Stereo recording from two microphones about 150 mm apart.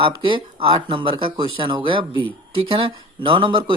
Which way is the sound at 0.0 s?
35° right (ahead or behind).